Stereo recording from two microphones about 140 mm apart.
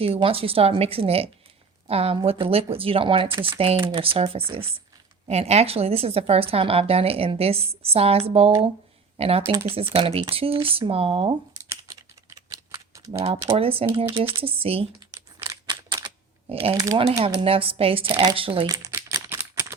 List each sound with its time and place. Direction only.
0.0 s a woman's voice: 45° right (ahead or behind)
11.7 s typing: 25° right (ahead or behind)
13.1 s a woman's voice: 45° right (ahead or behind)
14.1 s speech: 20° right (ahead or behind)
14.4 s a woman's voice: 40° right (ahead or behind)
15.1 s a sound: 20° right (ahead or behind)
15.7 s camera: 35° right (ahead or behind)
17.0 s speech: 40° right (ahead or behind); by 18.9 s 25° right (ahead or behind)
19.3 s a sound: 15° right (ahead or behind)